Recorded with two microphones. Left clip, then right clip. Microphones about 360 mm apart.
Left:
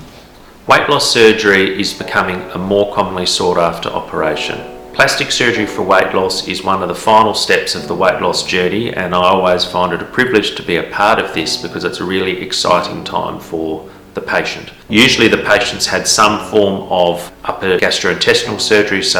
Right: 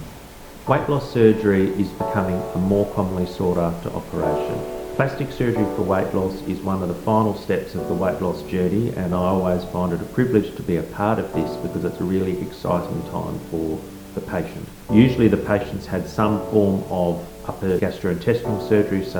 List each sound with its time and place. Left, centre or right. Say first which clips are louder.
0.7 s speech: left 11 dB; centre
4.9 s speech: left 13 dB; centre; by 7.3 s left
7.3 s speech: left 11 dB; centre
13.1 s speech: left 13 dB; left
14.3 s speech: left 13 dB; centre
16.6 s speech: left 8 dB; left
17.4 s speech: left 9 dB; centre